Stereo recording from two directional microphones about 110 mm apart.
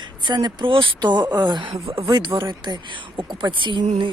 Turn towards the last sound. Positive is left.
turn(degrees=-45)  # may be behind; listen again after turning